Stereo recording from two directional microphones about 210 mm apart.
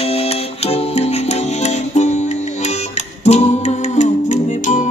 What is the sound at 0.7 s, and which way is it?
Music, 30° left (ahead or behind).